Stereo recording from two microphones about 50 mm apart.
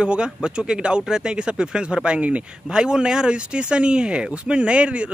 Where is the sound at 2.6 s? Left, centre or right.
Centre.